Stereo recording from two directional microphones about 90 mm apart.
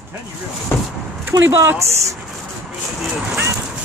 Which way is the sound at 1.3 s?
30° right (ahead or behind).